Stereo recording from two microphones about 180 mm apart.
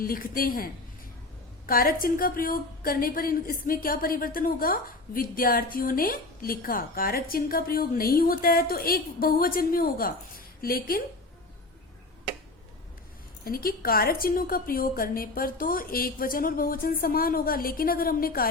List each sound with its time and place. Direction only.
0.0 s a woman's voice: 55° left (ahead or behind)
13.4 s a woman's voice: 55° left (ahead or behind)